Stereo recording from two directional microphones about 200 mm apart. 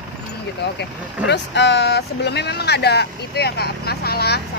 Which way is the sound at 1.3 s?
60° left (ahead or behind).